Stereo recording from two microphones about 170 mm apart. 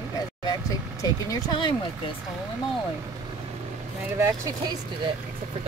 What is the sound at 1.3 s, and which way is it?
Speech, 25° left (ahead or behind).